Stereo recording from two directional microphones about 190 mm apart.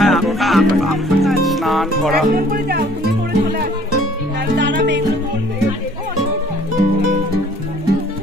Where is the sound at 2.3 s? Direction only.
50° right (ahead or behind).